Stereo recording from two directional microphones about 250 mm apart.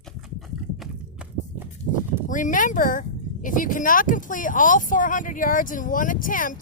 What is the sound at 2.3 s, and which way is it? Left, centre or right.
Speech, left.